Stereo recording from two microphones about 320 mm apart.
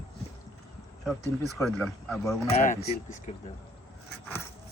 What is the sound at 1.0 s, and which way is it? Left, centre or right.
Speech, centre.